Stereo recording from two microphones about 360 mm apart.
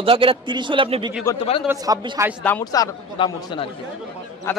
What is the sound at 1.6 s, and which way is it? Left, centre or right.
Speech, centre.